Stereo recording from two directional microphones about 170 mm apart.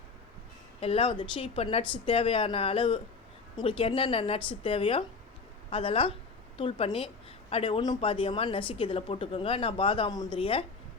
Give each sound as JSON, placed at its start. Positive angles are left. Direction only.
{"t": 0.8, "sound": "a woman's voice", "side_deg": 35}